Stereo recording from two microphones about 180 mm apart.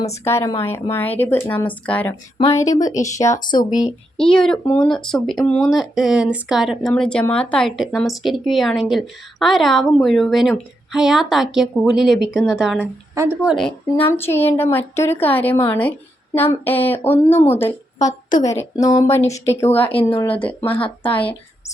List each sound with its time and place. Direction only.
0.1 s speech: 15° left (ahead or behind)
4.2 s a woman's voice: 5° left (ahead or behind)
21.0 s speech: 30° left (ahead or behind)